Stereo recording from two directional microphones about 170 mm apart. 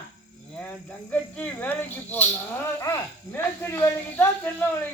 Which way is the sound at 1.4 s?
10° left (ahead or behind).